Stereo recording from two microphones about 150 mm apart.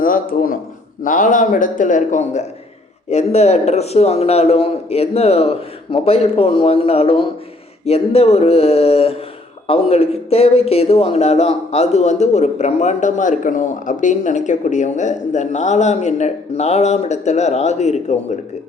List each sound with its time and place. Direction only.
0.0 s a man's voice: 65° left (ahead or behind); by 18.3 s 50° left (ahead or behind)